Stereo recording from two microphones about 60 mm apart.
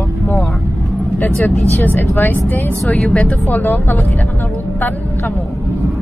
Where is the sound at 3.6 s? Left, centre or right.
Left.